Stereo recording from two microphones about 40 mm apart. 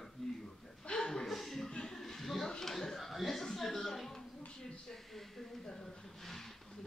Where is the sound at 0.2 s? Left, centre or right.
Centre.